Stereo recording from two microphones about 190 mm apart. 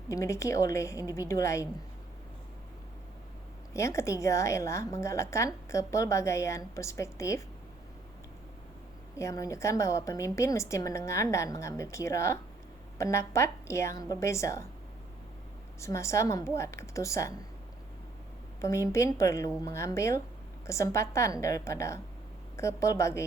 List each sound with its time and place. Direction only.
0.1 s a woman's voice: 15° left (ahead or behind)
3.8 s a woman's voice: 15° left (ahead or behind)
9.1 s a woman's voice: 15° left (ahead or behind)
15.8 s a woman's voice: 15° left (ahead or behind)
18.6 s a woman's voice: 15° left (ahead or behind)